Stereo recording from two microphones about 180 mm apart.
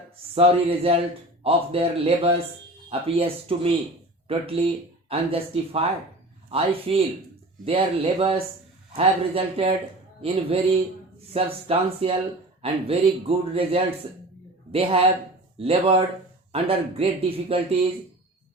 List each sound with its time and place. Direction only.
0.3 s speech: 30° right (ahead or behind)